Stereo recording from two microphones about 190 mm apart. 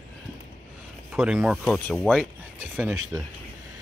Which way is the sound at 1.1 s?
10° right (ahead or behind).